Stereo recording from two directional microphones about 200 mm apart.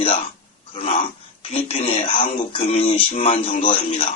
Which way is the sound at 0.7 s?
30° left (ahead or behind).